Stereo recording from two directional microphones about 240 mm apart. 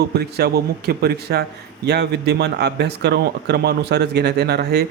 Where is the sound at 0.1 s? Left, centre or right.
Right.